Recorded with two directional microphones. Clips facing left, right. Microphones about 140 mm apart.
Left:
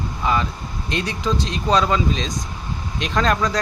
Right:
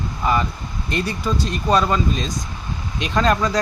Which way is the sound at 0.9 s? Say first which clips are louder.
Right 1 dB; 85° left.